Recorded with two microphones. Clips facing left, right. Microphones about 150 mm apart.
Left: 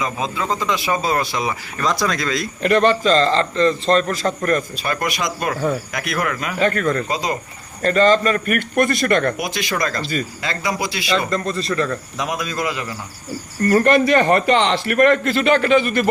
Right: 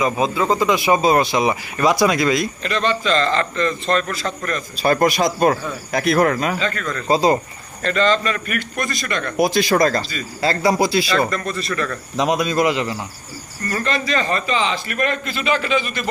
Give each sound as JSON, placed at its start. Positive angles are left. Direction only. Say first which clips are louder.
{"t": 0.0, "sound": "speech", "louder": "right 5 dB", "side_deg": -10}
{"t": 2.6, "sound": "a man's voice", "louder": "left 6 dB", "side_deg": 55}
{"t": 4.8, "sound": "speech", "louder": "right 7 dB", "side_deg": -35}
{"t": 6.6, "sound": "a man's voice", "louder": "left 6 dB", "side_deg": 50}
{"t": 7.1, "sound": "speech", "louder": "right 7 dB", "side_deg": -30}
{"t": 7.8, "sound": "a man's voice", "louder": "left 3 dB", "side_deg": 40}
{"t": 9.4, "sound": "speech", "louder": "right 7 dB", "side_deg": -35}
{"t": 12.1, "sound": "a man's voice", "louder": "right 6 dB", "side_deg": -25}
{"t": 13.7, "sound": "a man's voice", "louder": "left 8 dB", "side_deg": 55}